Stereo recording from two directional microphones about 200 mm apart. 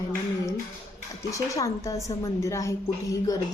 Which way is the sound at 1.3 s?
15° left (ahead or behind).